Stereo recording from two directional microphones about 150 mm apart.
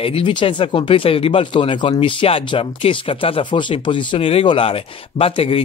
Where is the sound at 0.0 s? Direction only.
35° left (ahead or behind).